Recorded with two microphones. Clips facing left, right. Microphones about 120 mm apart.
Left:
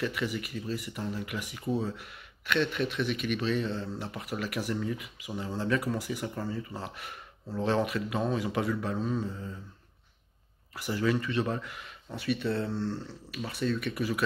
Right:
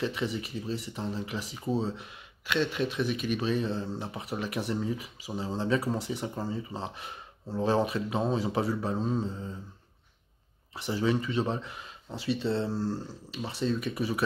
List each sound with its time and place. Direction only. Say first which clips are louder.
0.0 s speech: right 1 dB; 25° right (ahead or behind)
3.3 s speech: right 1 dB; 20° right (ahead or behind)
10.7 s speech: right 1 dB; 25° right (ahead or behind)